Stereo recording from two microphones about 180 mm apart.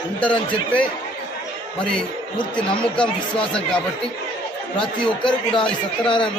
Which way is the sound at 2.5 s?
5° left (ahead or behind).